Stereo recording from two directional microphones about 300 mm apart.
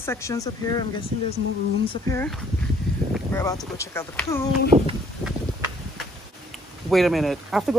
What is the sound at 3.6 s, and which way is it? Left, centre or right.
Speech, centre.